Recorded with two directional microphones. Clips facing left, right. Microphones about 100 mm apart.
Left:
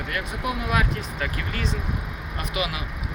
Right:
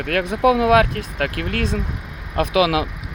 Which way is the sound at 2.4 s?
90° right.